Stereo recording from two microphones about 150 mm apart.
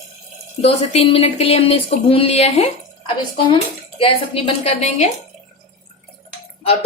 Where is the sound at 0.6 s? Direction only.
40° left (ahead or behind).